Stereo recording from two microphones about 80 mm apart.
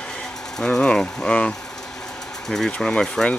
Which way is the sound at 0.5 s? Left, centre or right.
Centre.